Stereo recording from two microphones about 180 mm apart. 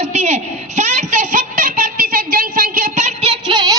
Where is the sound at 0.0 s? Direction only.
40° right (ahead or behind).